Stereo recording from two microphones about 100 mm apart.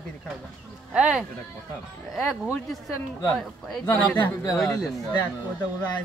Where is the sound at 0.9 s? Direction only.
5° right (ahead or behind).